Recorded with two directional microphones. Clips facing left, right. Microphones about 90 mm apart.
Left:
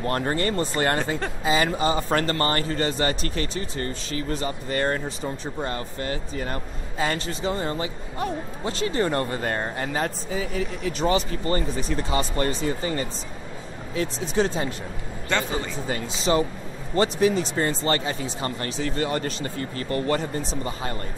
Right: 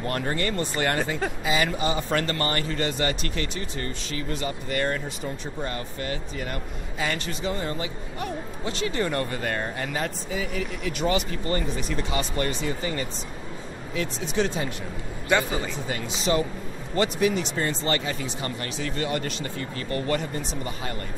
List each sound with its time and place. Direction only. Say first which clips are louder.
0.0 s a man's voice: left 3 dB; 35° left (ahead or behind)
15.3 s speech: right 3 dB; 10° right (ahead or behind)
15.9 s a man's voice: left 2 dB; 35° left (ahead or behind)